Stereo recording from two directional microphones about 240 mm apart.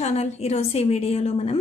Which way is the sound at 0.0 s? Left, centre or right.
Left.